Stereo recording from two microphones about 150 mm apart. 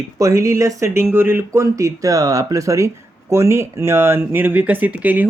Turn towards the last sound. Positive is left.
turn(degrees=-10)  # may be behind; listen again after turning